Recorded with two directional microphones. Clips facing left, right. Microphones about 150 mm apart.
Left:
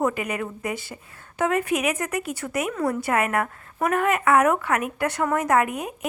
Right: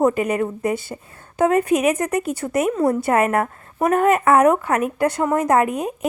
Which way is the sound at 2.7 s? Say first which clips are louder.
Right 4 dB; 30° right (ahead or behind).